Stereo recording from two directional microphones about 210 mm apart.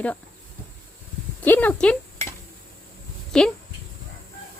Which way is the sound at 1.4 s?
10° left (ahead or behind).